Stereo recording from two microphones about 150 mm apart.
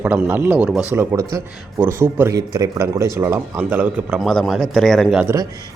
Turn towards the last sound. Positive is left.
turn(degrees=-15)  # may be behind; listen again after turning